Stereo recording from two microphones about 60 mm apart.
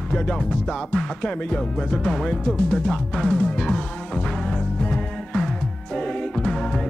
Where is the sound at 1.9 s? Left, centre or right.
Centre.